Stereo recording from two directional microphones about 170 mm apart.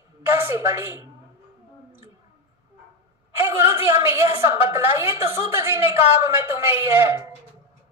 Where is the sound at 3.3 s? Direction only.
15° right (ahead or behind).